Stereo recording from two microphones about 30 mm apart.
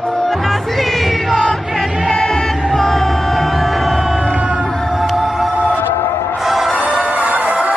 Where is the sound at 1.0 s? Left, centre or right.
Centre.